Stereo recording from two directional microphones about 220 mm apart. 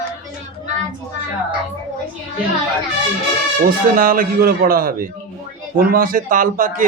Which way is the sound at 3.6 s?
40° right (ahead or behind).